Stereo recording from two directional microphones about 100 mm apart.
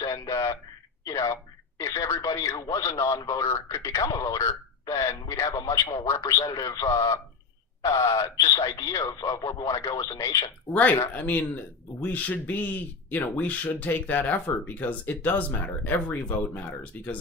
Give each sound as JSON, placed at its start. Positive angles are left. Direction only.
{"t": 0.0, "sound": "radio", "side_deg": 35}
{"t": 1.0, "sound": "speech", "side_deg": 35}
{"t": 11.0, "sound": "speech", "side_deg": 20}